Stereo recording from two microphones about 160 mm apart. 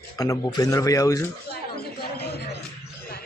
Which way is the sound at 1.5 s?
80° left.